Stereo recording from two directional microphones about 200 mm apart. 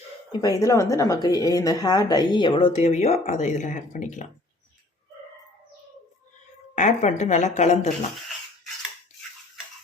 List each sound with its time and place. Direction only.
0.3 s a woman's voice: 15° left (ahead or behind); by 4.3 s 40° left (ahead or behind)
6.7 s speech: 35° left (ahead or behind)